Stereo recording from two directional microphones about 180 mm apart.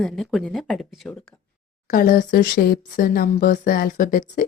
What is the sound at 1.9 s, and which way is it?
Speech, 50° left (ahead or behind).